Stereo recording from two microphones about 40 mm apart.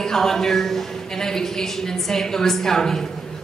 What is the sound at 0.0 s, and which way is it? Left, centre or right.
A man's voice, centre.